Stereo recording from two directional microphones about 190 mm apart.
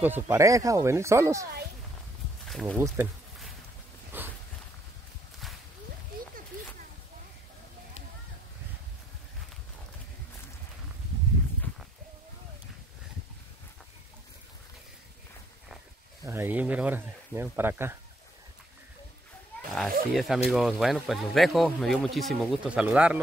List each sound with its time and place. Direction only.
0.0 s speech: 10° right (ahead or behind)
2.4 s speech: centre (ahead or behind)
4.1 s a sound: 10° right (ahead or behind)
16.3 s speech: 10° right (ahead or behind)
19.7 s speech: centre (ahead or behind)